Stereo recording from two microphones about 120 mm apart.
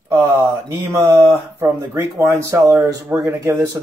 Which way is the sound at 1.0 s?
25° right (ahead or behind).